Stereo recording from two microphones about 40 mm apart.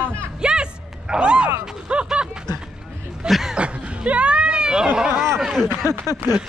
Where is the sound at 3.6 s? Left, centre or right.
Right.